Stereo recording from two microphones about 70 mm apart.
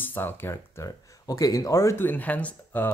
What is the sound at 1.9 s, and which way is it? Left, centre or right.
Speech, left.